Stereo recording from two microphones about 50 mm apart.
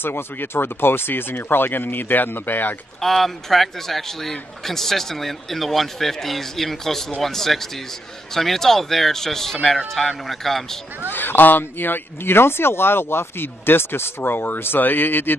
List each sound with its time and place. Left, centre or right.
0.0 s speech: left
3.0 s speech: centre
11.1 s speech: left